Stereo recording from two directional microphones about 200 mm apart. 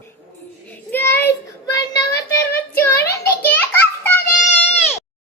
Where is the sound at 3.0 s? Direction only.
50° left (ahead or behind).